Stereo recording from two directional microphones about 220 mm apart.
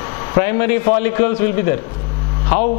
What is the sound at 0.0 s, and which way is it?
A man's voice, 20° left (ahead or behind).